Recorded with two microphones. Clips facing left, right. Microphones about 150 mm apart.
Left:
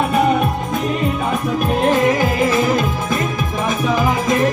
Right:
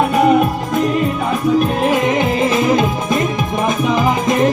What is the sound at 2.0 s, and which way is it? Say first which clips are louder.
Music: right 1 dB; 20° right (ahead or behind).